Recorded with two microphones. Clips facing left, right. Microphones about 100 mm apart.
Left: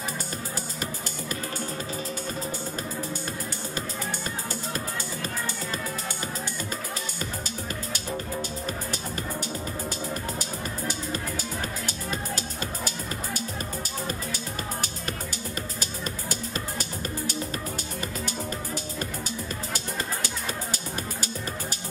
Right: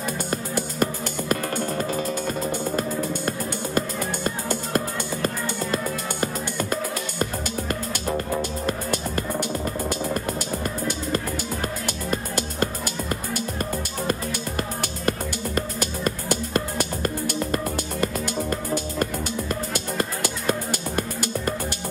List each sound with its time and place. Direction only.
0.3 s music: 60° right (ahead or behind)